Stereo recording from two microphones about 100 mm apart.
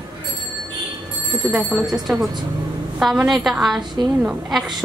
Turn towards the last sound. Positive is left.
turn(degrees=-5)  # may be behind; listen again after turning